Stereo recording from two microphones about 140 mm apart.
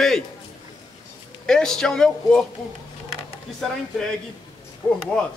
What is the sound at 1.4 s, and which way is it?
A man's voice, 5° left (ahead or behind).